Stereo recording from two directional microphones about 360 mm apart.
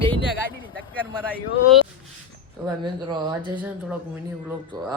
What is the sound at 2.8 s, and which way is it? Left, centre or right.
Speech, centre.